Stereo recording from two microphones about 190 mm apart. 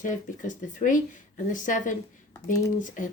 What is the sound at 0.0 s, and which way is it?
A woman's voice, 40° left (ahead or behind).